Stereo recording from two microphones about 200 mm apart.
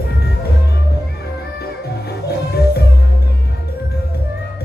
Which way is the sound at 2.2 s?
55° left (ahead or behind).